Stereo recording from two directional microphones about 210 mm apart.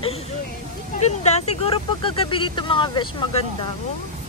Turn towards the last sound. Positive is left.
turn(degrees=25)  # may be behind; listen again after turning